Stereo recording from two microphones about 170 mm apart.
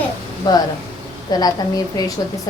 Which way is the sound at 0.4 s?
25° left (ahead or behind).